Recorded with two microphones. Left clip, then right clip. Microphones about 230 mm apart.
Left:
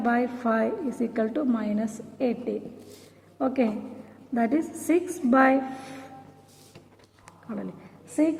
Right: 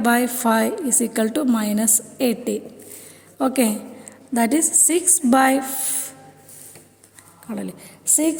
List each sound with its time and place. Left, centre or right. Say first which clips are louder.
0.0 s a woman's voice: right 6 dB; right
4.4 s a woman's voice: right 7 dB; right
7.4 s speech: right 5 dB; right